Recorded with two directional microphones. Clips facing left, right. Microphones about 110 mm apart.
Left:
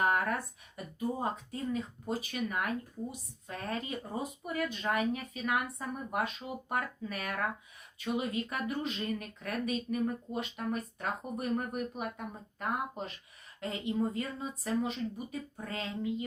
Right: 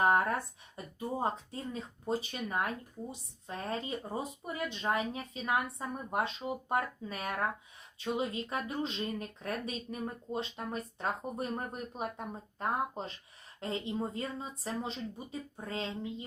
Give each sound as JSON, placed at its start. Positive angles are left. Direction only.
{"t": 0.0, "sound": "speech", "side_deg": -30}